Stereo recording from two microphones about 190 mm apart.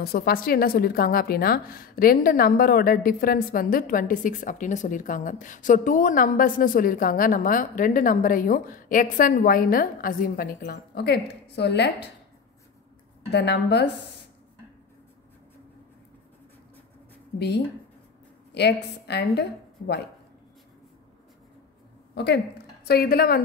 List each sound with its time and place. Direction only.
0.0 s a woman's voice: 55° left (ahead or behind)
13.3 s a woman's voice: 60° left (ahead or behind)
18.5 s a woman's voice: 60° left (ahead or behind)
22.1 s a woman's voice: 60° left (ahead or behind)